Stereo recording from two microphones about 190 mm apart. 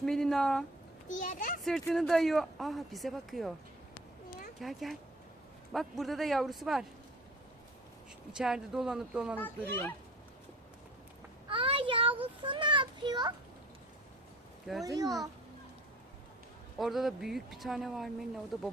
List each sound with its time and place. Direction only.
0.0 s speech: centre (ahead or behind)
1.2 s a child's voice: 45° left (ahead or behind)
1.9 s speech: centre (ahead or behind)
4.6 s speech: centre (ahead or behind)
8.4 s speech: 5° right (ahead or behind)
9.4 s speech: 10° left (ahead or behind)
11.4 s a child's voice: 25° right (ahead or behind)
14.8 s a child's voice: 20° right (ahead or behind)
16.7 s speech: centre (ahead or behind)